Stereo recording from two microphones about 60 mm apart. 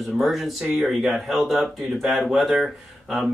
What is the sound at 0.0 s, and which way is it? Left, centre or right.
Speech, centre.